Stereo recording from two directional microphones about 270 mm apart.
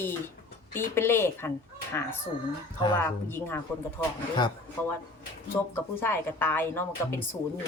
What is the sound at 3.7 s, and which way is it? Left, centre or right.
Speech, centre.